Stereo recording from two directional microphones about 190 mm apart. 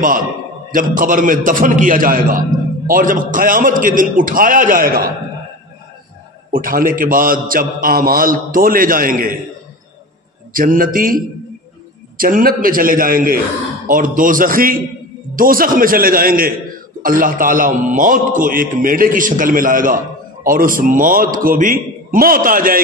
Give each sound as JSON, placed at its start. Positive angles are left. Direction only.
{"t": 0.0, "sound": "a man's voice", "side_deg": -45}
{"t": 6.5, "sound": "a man's voice", "side_deg": -50}
{"t": 10.5, "sound": "a man's voice", "side_deg": -45}